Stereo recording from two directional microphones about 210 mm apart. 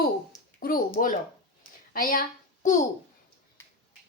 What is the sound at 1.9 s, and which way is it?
Speech, 40° left (ahead or behind).